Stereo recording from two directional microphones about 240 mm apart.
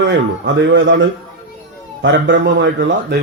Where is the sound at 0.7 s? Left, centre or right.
Right.